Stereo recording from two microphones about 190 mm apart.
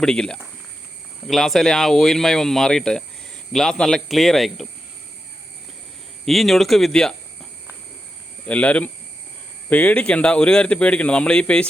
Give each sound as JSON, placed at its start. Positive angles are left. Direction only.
{"t": 0.0, "sound": "speech", "side_deg": 5}
{"t": 6.2, "sound": "speech", "side_deg": 0}
{"t": 8.4, "sound": "speech", "side_deg": 5}